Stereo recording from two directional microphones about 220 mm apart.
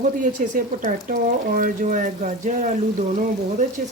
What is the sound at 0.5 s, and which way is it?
Speech, 35° right (ahead or behind).